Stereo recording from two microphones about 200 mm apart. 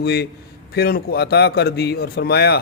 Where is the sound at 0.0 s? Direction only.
50° left (ahead or behind).